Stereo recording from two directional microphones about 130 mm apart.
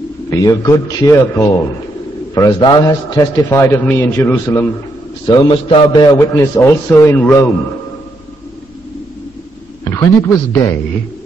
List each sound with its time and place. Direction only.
0.3 s a man's voice: 25° left (ahead or behind)
5.2 s a man's voice: 35° left (ahead or behind)
6.1 s a man's voice: 20° left (ahead or behind)
9.8 s a man's voice: 20° left (ahead or behind)